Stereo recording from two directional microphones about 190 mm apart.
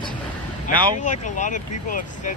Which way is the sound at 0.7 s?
40° left (ahead or behind).